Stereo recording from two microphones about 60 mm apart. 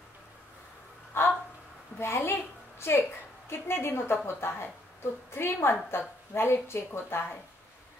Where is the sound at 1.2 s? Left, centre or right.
Left.